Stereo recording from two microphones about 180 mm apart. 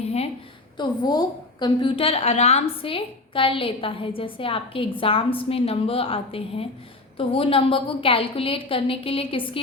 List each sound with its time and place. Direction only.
0.8 s a woman's voice: 25° left (ahead or behind)